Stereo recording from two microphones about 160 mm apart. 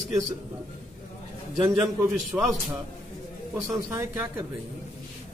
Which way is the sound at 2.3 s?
20° right (ahead or behind).